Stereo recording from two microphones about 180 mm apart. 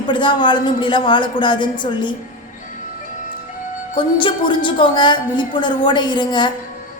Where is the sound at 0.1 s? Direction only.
25° left (ahead or behind).